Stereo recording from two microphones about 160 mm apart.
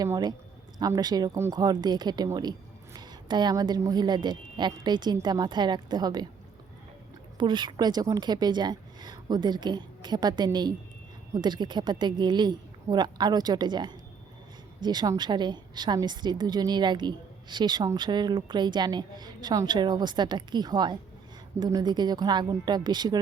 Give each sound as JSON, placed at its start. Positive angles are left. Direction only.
{"t": 0.0, "sound": "a woman's voice", "side_deg": -25}
{"t": 7.3, "sound": "a woman's voice", "side_deg": -30}